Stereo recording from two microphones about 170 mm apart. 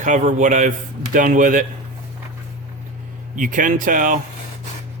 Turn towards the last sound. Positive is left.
turn(degrees=-50)  # may be behind; listen again after turning